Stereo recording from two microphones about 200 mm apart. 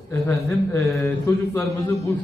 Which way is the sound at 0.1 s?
15° left (ahead or behind).